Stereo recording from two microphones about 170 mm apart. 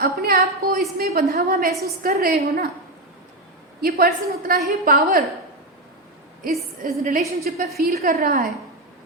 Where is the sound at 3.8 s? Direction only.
65° right (ahead or behind).